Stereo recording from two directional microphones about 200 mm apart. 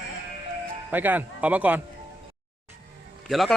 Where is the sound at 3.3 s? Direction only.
Centre (ahead or behind).